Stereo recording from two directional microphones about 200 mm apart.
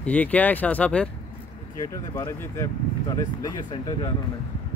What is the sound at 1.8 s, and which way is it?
Speech, 20° left (ahead or behind).